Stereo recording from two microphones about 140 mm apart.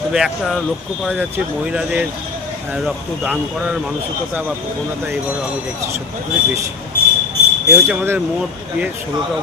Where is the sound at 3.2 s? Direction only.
10° right (ahead or behind).